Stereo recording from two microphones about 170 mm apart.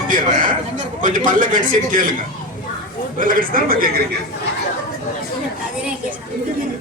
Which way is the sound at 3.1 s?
55° right (ahead or behind).